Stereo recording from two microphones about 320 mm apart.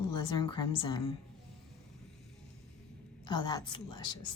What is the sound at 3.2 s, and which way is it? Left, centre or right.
Speech, centre.